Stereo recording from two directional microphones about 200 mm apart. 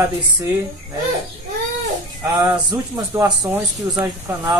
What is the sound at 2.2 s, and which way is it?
Speech, 15° right (ahead or behind).